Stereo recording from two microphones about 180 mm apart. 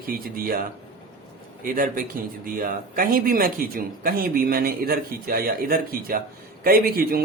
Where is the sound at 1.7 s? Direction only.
50° right (ahead or behind).